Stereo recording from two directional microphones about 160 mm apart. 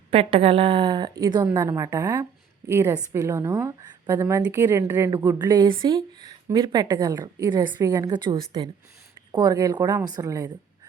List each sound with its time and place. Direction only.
0.1 s a woman's voice: 35° right (ahead or behind)